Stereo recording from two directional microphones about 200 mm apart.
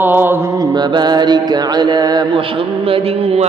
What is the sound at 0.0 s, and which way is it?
Mantra, 10° right (ahead or behind).